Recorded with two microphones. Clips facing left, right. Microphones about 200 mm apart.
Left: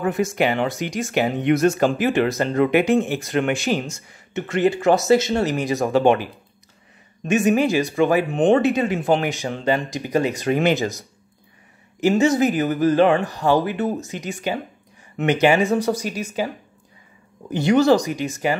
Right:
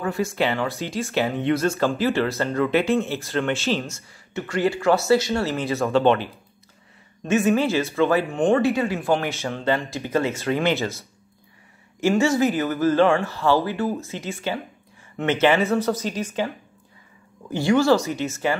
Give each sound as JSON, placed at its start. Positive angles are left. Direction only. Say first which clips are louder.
{"t": 0.0, "sound": "speech", "louder": "left 3 dB", "side_deg": 20}